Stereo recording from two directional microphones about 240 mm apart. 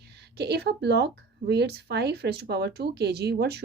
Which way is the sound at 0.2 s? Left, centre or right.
Right.